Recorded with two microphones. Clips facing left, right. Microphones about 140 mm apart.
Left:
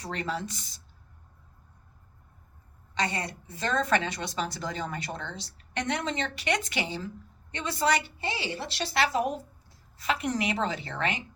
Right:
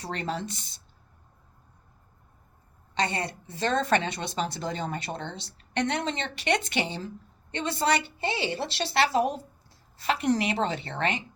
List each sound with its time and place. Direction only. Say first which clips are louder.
0.0 s a woman's voice: right 1 dB; 30° right (ahead or behind)
2.9 s a woman's voice: right 2 dB; 25° right (ahead or behind)